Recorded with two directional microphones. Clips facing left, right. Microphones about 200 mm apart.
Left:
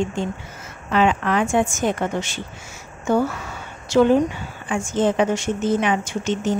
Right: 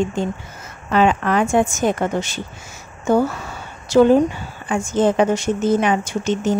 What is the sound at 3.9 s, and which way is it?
Speech, 35° right (ahead or behind).